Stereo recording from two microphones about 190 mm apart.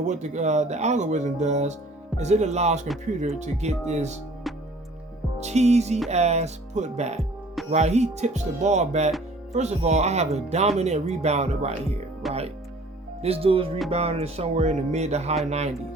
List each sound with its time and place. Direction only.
0.0 s speech: 40° right (ahead or behind)
5.4 s speech: 35° right (ahead or behind)
12.2 s speech: centre (ahead or behind)
13.2 s speech: 30° right (ahead or behind)